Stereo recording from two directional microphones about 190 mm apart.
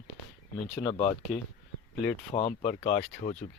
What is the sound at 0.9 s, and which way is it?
Speech, 25° left (ahead or behind).